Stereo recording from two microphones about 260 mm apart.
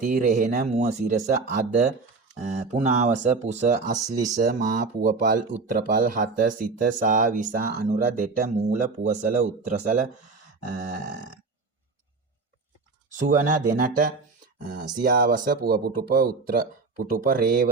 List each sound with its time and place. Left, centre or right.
0.0 s speech: right
13.1 s speech: right